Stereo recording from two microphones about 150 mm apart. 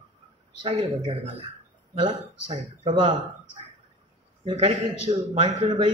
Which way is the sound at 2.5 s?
40° right (ahead or behind).